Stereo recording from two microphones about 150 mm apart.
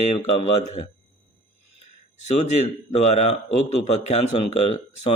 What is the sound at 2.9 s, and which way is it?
Speech, 45° left (ahead or behind).